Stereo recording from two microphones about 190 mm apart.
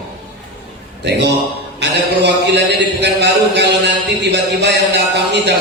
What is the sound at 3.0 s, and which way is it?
A man's voice, 60° right (ahead or behind).